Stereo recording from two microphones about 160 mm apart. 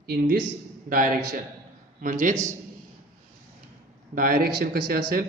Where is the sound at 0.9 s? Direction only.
60° right (ahead or behind).